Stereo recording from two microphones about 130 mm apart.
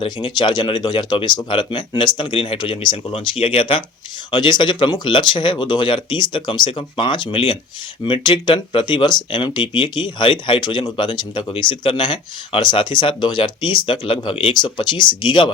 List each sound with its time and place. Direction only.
0.0 s speech: 40° left (ahead or behind)